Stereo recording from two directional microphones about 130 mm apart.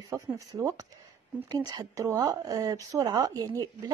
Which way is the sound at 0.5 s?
25° right (ahead or behind).